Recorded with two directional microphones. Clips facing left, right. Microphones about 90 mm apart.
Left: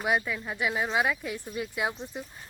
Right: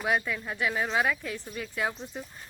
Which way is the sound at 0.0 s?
5° left (ahead or behind).